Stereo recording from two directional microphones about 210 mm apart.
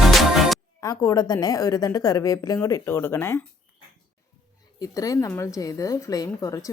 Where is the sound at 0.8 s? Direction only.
15° left (ahead or behind).